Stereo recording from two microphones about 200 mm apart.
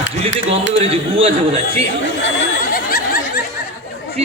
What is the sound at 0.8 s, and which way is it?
A man's voice, 30° right (ahead or behind).